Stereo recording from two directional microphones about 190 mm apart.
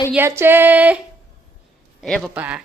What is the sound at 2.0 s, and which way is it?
Speech, centre (ahead or behind).